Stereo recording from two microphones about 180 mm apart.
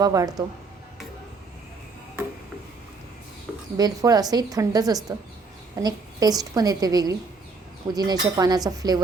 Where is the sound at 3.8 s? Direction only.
20° right (ahead or behind).